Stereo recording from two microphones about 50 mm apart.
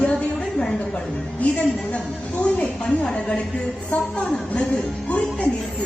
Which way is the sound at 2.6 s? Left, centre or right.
Left.